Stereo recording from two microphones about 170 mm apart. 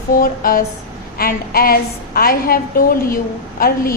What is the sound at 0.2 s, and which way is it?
A woman's voice, 55° left (ahead or behind).